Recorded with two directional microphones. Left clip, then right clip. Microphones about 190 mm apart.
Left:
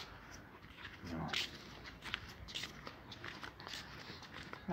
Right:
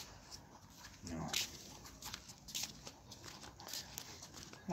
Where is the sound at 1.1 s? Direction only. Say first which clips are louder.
Left 1 dB; 10° right (ahead or behind).